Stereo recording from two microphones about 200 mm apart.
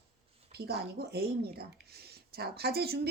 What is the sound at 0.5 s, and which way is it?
Speech, 50° right (ahead or behind).